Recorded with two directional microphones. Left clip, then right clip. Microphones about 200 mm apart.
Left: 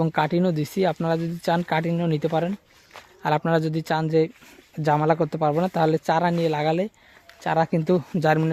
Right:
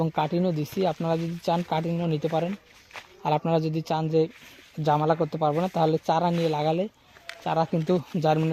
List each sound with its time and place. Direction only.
0.0 s speech: 25° left (ahead or behind)